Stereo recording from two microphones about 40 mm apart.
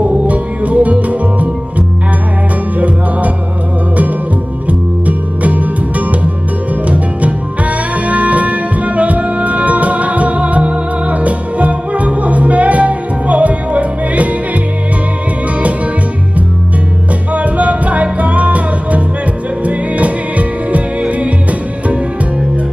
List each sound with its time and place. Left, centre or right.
0.3 s music: right
4.6 s music: right
17.3 s music: right